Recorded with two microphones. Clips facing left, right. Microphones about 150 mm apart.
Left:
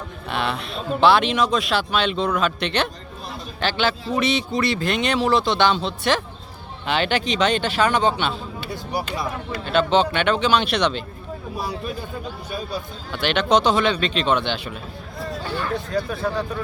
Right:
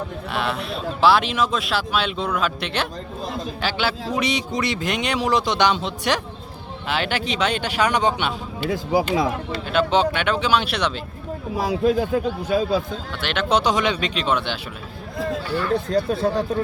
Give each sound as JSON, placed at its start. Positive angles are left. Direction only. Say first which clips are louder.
{"t": 0.3, "sound": "a man's voice", "louder": "left 1 dB", "side_deg": 0}
{"t": 6.8, "sound": "a man's voice", "louder": "left 2 dB", "side_deg": -5}
{"t": 9.6, "sound": "a man's voice", "louder": "left 1 dB", "side_deg": -10}
{"t": 11.5, "sound": "speech", "louder": "right 10 dB", "side_deg": -90}
{"t": 13.1, "sound": "a man's voice", "louder": "left 3 dB", "side_deg": 0}
{"t": 15.5, "sound": "speech", "louder": "right 4 dB", "side_deg": -35}